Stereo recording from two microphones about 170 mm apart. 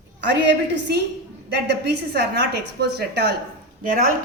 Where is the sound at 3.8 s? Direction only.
55° right (ahead or behind).